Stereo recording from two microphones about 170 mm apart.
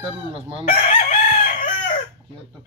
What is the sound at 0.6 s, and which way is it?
Chicken, 50° left (ahead or behind).